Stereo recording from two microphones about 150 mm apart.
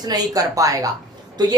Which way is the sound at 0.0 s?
25° right (ahead or behind).